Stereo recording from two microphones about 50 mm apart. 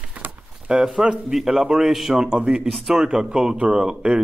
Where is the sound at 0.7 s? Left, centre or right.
Centre.